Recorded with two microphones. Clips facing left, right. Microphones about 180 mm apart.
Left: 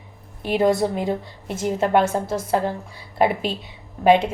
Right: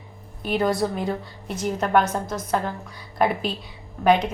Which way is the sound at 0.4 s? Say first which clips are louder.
Left 4 dB; 25° left (ahead or behind).